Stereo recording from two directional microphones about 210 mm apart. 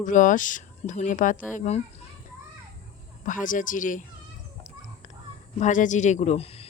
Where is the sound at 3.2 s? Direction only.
40° left (ahead or behind).